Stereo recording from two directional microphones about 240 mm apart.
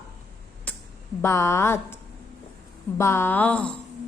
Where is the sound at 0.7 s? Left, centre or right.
Centre.